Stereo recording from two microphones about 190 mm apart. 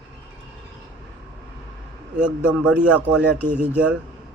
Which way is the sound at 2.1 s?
5° right (ahead or behind).